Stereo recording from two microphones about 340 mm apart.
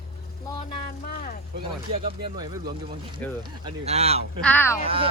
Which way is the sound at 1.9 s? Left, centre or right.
Centre.